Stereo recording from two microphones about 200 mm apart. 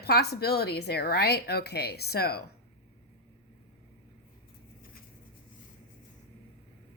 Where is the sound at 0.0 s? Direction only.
55° left (ahead or behind).